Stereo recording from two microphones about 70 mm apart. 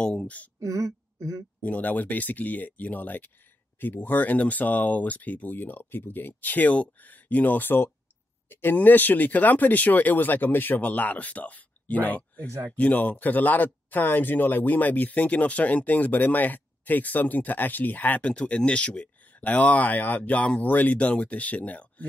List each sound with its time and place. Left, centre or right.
0.0 s speech: centre
0.6 s speech: right
1.6 s speech: left